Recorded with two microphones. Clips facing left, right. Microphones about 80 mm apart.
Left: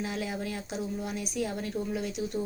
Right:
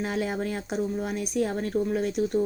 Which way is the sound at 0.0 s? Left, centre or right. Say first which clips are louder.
Right 5 dB; right.